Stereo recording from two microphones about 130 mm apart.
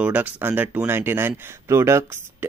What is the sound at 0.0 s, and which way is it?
Speech, 10° right (ahead or behind).